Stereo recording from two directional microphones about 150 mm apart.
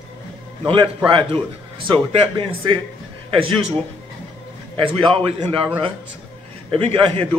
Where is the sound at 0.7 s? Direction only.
35° right (ahead or behind).